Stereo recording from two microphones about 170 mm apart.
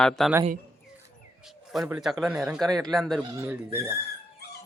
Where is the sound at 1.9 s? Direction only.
Centre (ahead or behind).